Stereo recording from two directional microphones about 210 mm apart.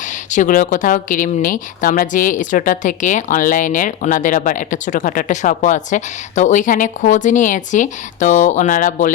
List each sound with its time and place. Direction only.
0.3 s speech: 40° left (ahead or behind)